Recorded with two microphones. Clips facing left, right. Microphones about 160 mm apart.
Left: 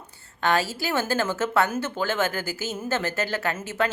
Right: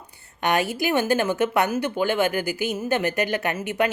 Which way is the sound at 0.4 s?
15° right (ahead or behind).